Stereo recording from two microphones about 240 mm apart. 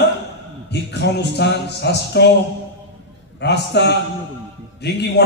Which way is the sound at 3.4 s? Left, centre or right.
Left.